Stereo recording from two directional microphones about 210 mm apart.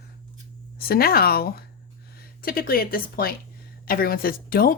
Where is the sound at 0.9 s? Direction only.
45° left (ahead or behind).